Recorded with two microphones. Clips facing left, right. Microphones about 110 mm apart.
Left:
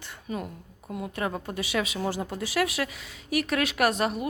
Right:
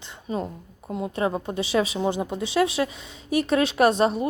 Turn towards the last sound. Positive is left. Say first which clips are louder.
# right 6 dB
turn(degrees=-30)  # may be behind; listen again after turning